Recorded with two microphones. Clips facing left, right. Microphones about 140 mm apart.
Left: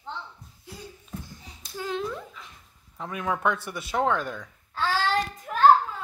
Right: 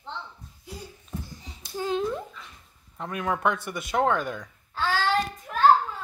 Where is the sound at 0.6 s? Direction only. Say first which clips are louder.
Right 1 dB; 5° left (ahead or behind).